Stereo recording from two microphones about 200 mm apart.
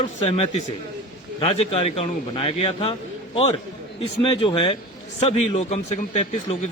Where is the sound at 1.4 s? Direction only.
30° left (ahead or behind).